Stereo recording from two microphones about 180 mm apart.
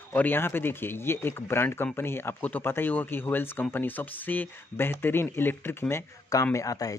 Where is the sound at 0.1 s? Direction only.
10° left (ahead or behind).